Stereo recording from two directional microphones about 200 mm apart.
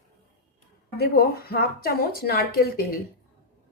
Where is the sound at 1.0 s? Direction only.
50° left (ahead or behind).